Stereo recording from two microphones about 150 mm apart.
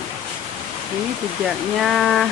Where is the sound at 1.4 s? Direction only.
Centre (ahead or behind).